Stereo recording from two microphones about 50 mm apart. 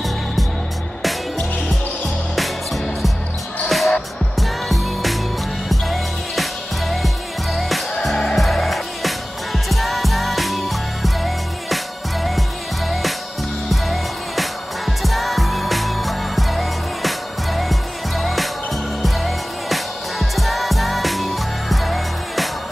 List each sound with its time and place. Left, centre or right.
2.3 s music: centre